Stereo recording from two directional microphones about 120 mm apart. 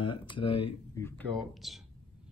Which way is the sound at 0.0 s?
45° left (ahead or behind).